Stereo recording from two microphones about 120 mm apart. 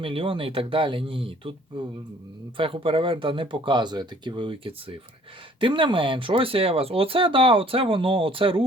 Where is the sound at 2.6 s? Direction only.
45° right (ahead or behind).